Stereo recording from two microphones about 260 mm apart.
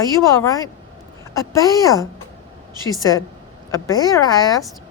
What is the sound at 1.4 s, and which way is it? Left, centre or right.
Speech, centre.